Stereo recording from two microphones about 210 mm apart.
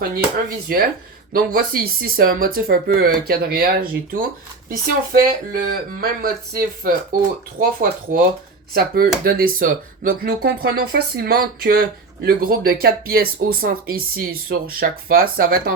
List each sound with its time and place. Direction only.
0.0 s speech: 45° right (ahead or behind)